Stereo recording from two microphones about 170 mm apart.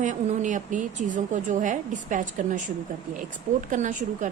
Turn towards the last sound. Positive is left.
turn(degrees=-45)  # may be behind; listen again after turning